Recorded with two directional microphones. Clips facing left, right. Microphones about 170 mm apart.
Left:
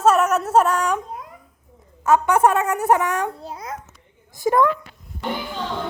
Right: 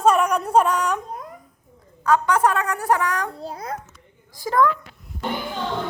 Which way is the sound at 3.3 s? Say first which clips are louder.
Right 2 dB; 35° right (ahead or behind).